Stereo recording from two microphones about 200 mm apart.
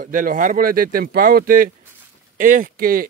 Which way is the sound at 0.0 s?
40° right (ahead or behind).